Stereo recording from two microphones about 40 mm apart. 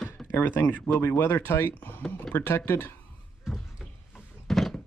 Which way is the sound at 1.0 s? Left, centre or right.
Left.